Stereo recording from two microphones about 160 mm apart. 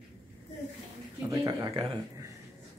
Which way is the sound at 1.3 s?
20° right (ahead or behind).